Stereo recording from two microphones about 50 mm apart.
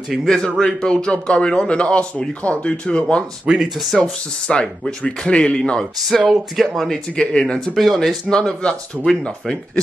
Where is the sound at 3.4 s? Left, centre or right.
Centre.